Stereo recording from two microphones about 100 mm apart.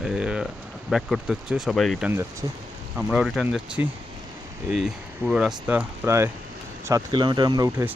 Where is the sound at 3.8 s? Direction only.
20° right (ahead or behind).